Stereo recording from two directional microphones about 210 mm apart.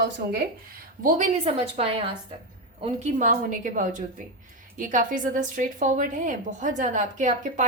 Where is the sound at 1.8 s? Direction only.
30° right (ahead or behind).